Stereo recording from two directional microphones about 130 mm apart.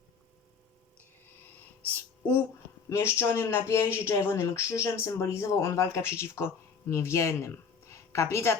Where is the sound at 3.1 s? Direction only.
20° left (ahead or behind).